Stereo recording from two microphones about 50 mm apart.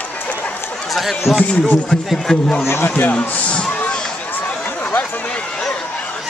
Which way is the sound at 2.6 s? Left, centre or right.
Left.